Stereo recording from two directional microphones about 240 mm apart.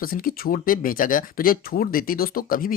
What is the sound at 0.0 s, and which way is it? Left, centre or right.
Speech, left.